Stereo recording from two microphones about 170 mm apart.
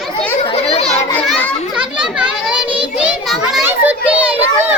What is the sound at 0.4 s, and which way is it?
Children playing, 35° left (ahead or behind).